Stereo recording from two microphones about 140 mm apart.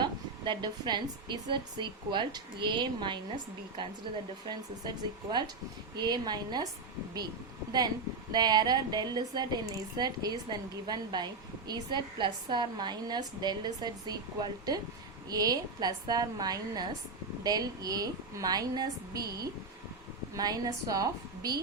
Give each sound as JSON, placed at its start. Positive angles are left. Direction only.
{"t": 0.0, "sound": "a woman's voice", "side_deg": -35}
{"t": 4.4, "sound": "a woman's voice", "side_deg": -30}
{"t": 8.3, "sound": "a woman's voice", "side_deg": -30}
{"t": 20.3, "sound": "a woman's voice", "side_deg": -30}